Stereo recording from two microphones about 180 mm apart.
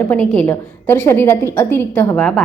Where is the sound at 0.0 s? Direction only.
10° left (ahead or behind).